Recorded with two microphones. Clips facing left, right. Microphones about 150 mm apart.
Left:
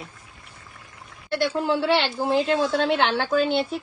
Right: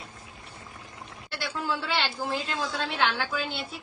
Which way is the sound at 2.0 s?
65° left (ahead or behind).